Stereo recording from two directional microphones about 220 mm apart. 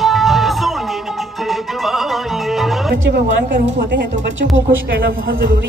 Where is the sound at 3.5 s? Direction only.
55° right (ahead or behind).